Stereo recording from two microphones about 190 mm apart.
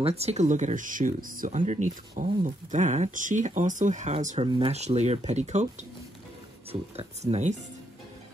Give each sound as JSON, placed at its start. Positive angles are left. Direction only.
{"t": 0.0, "sound": "speech", "side_deg": -35}